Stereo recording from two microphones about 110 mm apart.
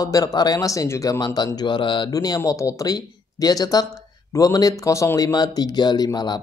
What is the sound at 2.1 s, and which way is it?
Speech, 35° left (ahead or behind).